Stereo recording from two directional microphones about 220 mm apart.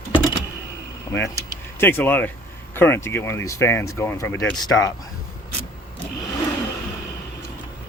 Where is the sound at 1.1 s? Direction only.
10° left (ahead or behind).